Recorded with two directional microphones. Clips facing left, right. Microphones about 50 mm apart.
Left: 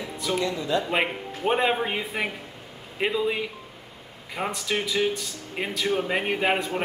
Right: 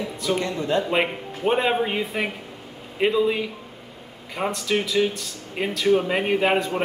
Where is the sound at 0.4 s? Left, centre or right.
Right.